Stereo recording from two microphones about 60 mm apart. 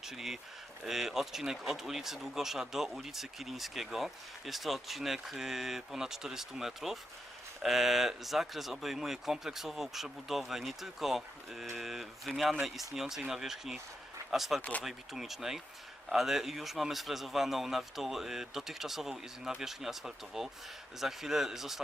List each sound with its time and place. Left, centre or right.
0.0 s speech: centre
14.6 s speech: left
14.8 s speech: centre